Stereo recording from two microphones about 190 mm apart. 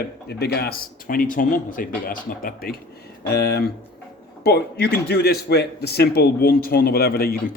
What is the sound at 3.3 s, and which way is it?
A man's voice, 60° left (ahead or behind).